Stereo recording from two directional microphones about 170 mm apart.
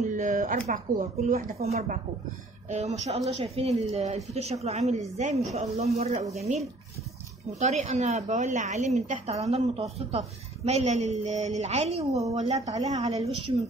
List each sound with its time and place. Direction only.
0.0 s a woman's voice: 50° right (ahead or behind)